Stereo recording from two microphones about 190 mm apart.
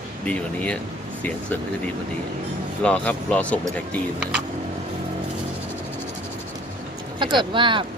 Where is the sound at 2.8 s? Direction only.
5° left (ahead or behind).